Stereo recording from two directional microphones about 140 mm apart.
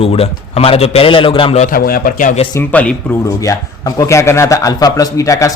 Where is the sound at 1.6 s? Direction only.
85° left.